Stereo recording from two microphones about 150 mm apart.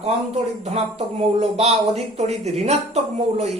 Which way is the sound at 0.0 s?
45° right (ahead or behind).